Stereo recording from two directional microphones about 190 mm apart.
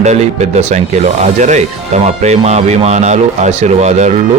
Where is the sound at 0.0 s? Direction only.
35° right (ahead or behind).